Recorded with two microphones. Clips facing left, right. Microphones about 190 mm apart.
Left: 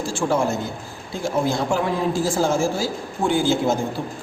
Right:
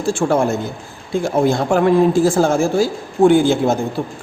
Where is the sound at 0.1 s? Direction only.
60° right (ahead or behind).